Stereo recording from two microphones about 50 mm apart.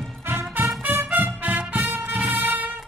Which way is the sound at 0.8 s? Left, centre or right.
Right.